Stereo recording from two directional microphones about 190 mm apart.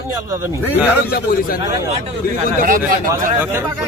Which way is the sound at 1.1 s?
50° left (ahead or behind).